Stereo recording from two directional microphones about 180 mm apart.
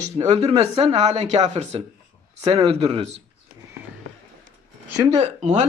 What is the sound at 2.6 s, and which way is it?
Speech, 35° right (ahead or behind).